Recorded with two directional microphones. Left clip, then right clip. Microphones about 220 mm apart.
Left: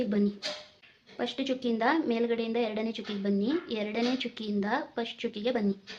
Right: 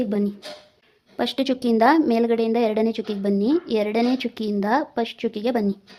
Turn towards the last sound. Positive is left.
turn(degrees=-40)  # may be behind; listen again after turning